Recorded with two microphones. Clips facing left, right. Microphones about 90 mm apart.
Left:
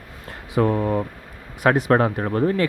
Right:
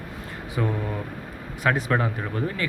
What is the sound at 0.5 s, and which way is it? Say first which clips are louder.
Speech: left 8 dB; 55° left (ahead or behind).